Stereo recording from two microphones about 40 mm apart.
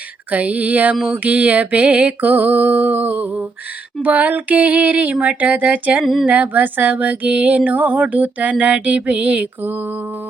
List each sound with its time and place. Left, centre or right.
0.3 s female singing: right
1.0 s music: right
2.2 s female singing: right
5.1 s music: right
5.4 s female singing: right
8.1 s music: right